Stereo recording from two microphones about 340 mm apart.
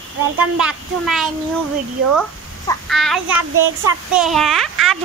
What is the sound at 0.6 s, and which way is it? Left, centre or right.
A woman's voice, centre.